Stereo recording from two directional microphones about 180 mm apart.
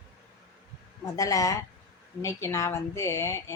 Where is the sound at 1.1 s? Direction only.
20° left (ahead or behind).